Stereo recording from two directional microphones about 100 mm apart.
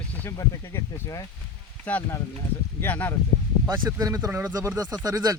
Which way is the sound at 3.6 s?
30° right (ahead or behind).